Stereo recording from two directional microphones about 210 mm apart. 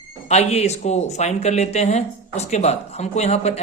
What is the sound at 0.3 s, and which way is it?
Speech, 30° left (ahead or behind).